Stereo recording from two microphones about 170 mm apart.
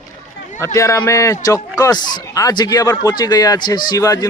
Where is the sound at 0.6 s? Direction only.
20° left (ahead or behind).